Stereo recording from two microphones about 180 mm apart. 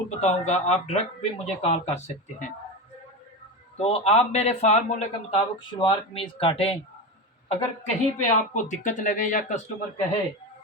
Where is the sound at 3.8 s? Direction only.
35° left (ahead or behind).